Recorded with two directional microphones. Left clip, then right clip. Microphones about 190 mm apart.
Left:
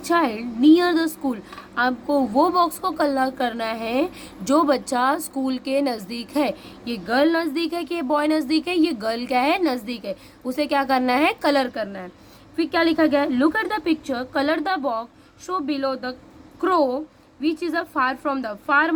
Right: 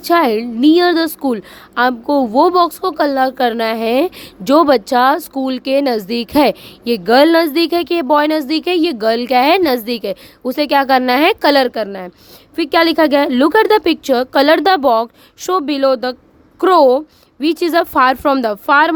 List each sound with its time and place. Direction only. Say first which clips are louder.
0.1 s a woman's voice: right 8 dB; 55° right (ahead or behind)